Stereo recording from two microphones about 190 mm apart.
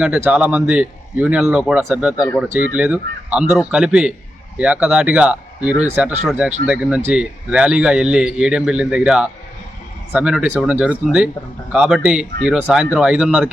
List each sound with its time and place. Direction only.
0.0 s a man's voice: 5° right (ahead or behind)